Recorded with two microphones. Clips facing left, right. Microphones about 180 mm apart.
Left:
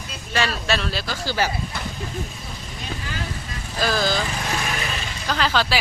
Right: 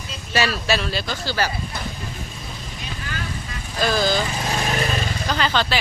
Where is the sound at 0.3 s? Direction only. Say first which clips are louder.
Right 2 dB; 5° right (ahead or behind).